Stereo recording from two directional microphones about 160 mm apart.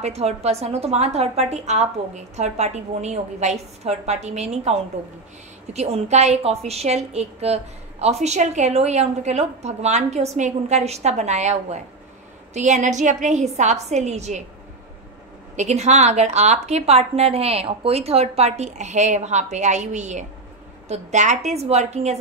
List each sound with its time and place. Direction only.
0.0 s a woman's voice: 40° right (ahead or behind)
15.5 s a woman's voice: 45° right (ahead or behind)